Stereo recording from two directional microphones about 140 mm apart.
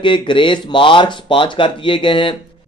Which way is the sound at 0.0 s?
35° left (ahead or behind).